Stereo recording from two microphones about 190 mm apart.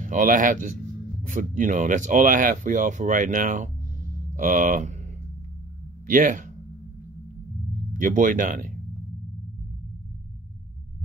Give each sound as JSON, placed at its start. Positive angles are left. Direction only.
{"t": 0.0, "sound": "speech", "side_deg": -45}
{"t": 6.0, "sound": "speech", "side_deg": -45}
{"t": 7.9, "sound": "speech", "side_deg": -45}